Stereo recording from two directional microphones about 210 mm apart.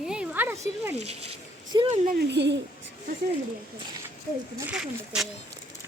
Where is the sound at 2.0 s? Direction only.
55° right (ahead or behind).